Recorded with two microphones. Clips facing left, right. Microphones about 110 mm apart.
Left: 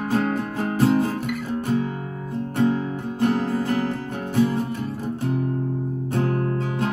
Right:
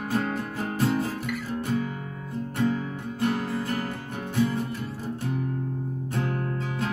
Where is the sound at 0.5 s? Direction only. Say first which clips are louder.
Left 7 dB; 45° left (ahead or behind).